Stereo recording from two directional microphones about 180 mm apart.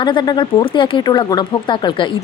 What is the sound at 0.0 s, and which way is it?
A woman's voice, 25° left (ahead or behind).